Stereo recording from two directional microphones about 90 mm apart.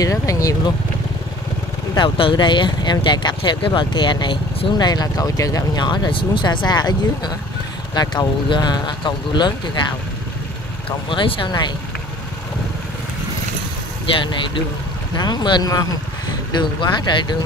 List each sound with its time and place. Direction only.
0.0 s speech: 40° left (ahead or behind)
2.0 s speech: 65° left (ahead or behind)
4.8 s speech: 45° left (ahead or behind)
5.9 s speech: 65° left (ahead or behind)
10.9 s speech: 80° left
14.1 s speech: 70° left (ahead or behind)
15.1 s speech: 50° left (ahead or behind)
16.5 s speech: 55° left (ahead or behind)